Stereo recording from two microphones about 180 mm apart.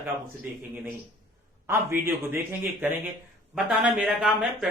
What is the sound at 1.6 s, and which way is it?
A man's voice, 15° right (ahead or behind).